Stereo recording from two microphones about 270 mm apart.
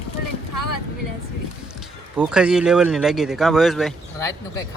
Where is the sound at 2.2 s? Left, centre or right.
Centre.